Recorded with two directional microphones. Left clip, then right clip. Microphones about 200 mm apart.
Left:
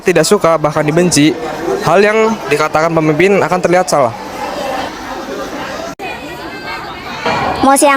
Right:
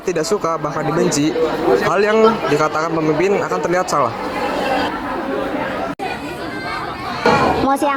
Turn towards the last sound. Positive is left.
turn(degrees=55)  # may be behind; listen again after turning